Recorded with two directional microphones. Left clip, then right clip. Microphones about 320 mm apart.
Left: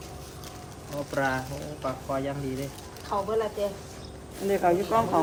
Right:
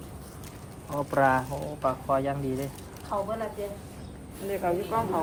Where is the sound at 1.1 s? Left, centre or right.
Centre.